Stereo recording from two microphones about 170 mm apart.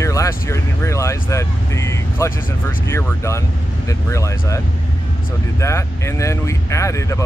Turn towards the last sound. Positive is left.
turn(degrees=20)  # may be behind; listen again after turning